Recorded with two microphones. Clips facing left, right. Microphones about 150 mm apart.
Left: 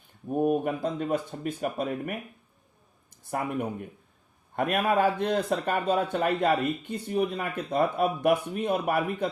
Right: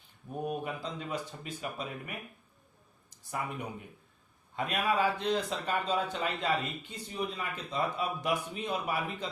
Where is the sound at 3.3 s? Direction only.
50° left (ahead or behind).